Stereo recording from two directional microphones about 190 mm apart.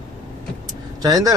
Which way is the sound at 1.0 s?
20° right (ahead or behind).